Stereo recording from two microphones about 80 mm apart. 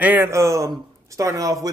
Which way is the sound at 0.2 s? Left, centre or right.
Right.